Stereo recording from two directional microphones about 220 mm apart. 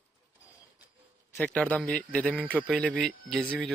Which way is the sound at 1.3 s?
5° left (ahead or behind).